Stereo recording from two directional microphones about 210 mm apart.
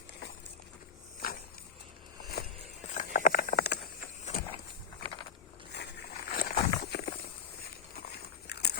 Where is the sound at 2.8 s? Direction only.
35° left (ahead or behind).